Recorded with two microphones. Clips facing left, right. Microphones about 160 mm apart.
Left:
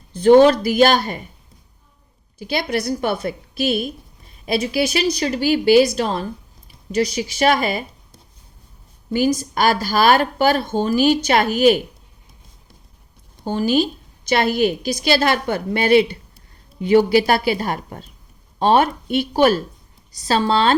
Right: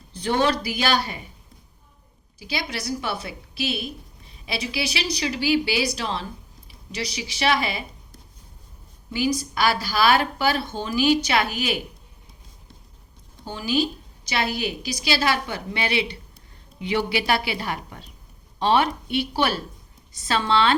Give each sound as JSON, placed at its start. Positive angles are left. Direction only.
{"t": 0.1, "sound": "a woman's voice", "side_deg": 50}
{"t": 2.4, "sound": "a woman's voice", "side_deg": 55}
{"t": 9.1, "sound": "a woman's voice", "side_deg": 45}
{"t": 13.4, "sound": "a woman's voice", "side_deg": 50}